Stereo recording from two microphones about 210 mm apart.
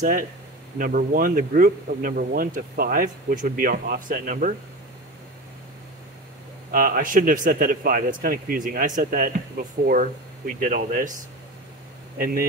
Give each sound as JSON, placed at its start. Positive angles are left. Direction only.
{"t": 0.0, "sound": "a man's voice", "side_deg": -40}
{"t": 6.7, "sound": "a man's voice", "side_deg": -45}